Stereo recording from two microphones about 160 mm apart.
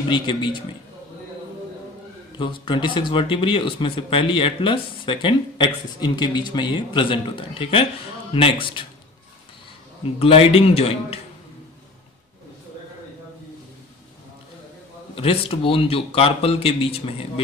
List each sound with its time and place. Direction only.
0.1 s a man's voice: 30° left (ahead or behind)
2.3 s speech: 30° left (ahead or behind)
10.1 s speech: 35° left (ahead or behind)
15.1 s speech: 35° left (ahead or behind)